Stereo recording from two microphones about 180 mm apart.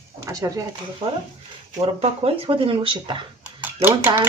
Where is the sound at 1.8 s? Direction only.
35° right (ahead or behind).